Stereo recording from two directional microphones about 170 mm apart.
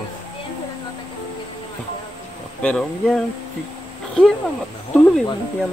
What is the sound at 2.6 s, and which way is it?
Speech, 5° left (ahead or behind).